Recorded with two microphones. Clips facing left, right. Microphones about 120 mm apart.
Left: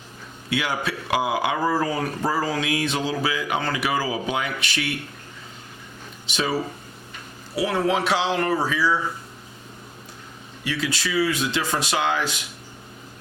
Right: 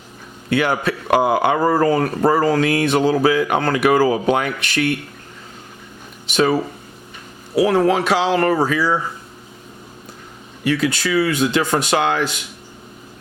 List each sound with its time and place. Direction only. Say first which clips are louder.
0.5 s speech: right 7 dB; 55° right (ahead or behind)
6.2 s speech: right 9 dB; 55° right (ahead or behind)
7.6 s speech: right 7 dB; 45° right (ahead or behind)
8.3 s speech: right 6 dB; 65° right (ahead or behind)
8.5 s speech: right 4 dB; 50° right (ahead or behind)
10.6 s speech: right 8 dB; 55° right (ahead or behind)